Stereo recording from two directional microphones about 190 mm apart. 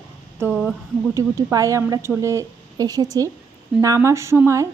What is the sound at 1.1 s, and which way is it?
A woman's voice, 15° right (ahead or behind).